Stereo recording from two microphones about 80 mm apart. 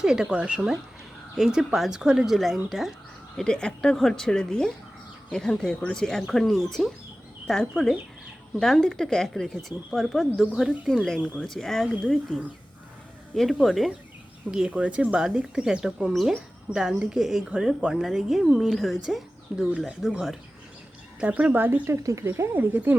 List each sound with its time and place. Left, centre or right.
0.0 s speech: centre
3.3 s a woman's voice: centre
14.5 s speech: centre
21.2 s speech: centre
22.0 s speech: right